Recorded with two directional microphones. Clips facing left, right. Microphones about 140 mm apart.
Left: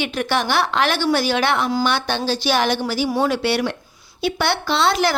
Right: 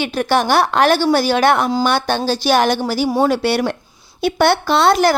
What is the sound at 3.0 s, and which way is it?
Speech, 25° right (ahead or behind).